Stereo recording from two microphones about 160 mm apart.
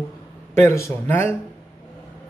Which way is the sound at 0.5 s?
15° left (ahead or behind).